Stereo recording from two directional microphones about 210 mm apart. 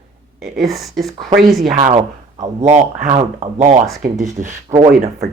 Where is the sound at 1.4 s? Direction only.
Centre (ahead or behind).